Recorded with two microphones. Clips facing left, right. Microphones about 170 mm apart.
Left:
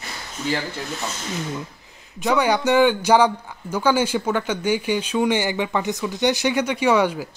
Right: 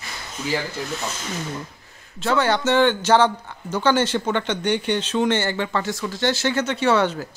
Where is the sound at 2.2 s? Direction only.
15° left (ahead or behind).